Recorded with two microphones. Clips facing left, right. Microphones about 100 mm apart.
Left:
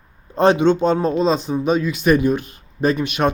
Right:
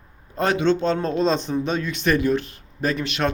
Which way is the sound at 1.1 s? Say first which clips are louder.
Left 3 dB; 5° left (ahead or behind).